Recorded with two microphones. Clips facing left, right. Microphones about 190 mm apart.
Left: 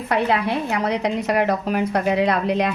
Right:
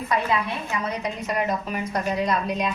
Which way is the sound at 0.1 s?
70° left (ahead or behind).